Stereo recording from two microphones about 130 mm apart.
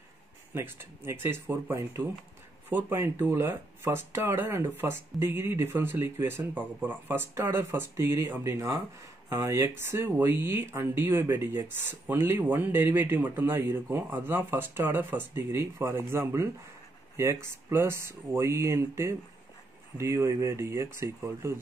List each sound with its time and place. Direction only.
0.6 s speech: 15° right (ahead or behind)